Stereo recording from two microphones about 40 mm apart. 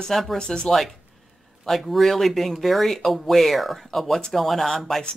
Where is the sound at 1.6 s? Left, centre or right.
Centre.